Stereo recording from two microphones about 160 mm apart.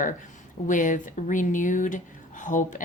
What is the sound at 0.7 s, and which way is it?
A woman's voice, 55° left (ahead or behind).